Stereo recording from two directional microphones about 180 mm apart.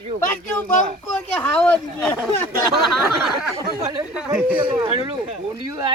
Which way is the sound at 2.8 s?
Centre (ahead or behind).